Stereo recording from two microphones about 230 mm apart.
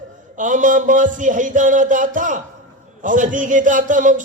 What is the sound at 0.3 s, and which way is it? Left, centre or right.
A man's voice, right.